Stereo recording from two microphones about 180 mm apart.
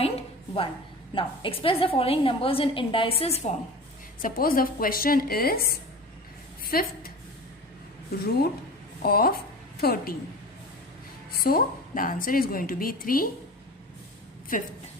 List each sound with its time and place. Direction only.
0.0 s a sound: 30° left (ahead or behind)
1.1 s a woman's voice: 30° left (ahead or behind)
4.2 s a woman's voice: 55° left (ahead or behind)
9.0 s a woman's voice: 55° left (ahead or behind)
11.4 s a woman's voice: 50° left (ahead or behind)
14.5 s a woman's voice: 50° left (ahead or behind)